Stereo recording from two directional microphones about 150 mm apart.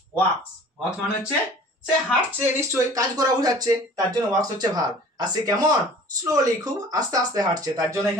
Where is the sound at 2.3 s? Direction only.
15° right (ahead or behind).